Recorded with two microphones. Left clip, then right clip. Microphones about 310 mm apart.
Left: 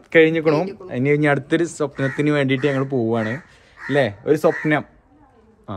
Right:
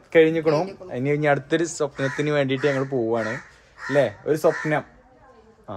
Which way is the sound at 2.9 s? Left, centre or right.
Left.